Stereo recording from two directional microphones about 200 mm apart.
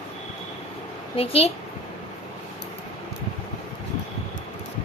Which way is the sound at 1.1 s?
30° left (ahead or behind).